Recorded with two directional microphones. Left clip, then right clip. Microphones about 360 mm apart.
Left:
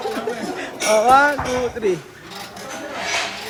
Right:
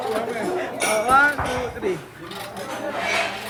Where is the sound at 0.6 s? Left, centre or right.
Centre.